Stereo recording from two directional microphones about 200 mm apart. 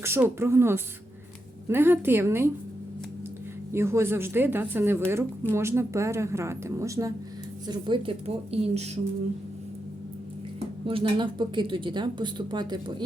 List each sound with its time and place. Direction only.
0.0 s a woman's voice: 10° right (ahead or behind)
3.7 s a woman's voice: 15° right (ahead or behind); by 8.9 s 30° right (ahead or behind)
10.8 s speech: 25° right (ahead or behind)